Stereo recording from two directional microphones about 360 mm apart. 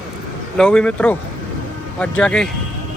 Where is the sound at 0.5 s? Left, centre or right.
Centre.